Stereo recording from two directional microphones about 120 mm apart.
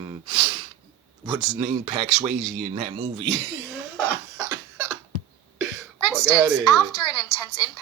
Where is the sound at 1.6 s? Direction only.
70° right (ahead or behind); by 2.9 s 85° right.